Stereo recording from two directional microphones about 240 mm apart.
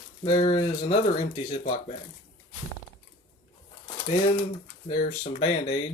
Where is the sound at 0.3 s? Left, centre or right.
Left.